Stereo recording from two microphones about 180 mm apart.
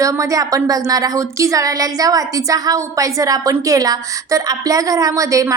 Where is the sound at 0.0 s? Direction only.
20° right (ahead or behind).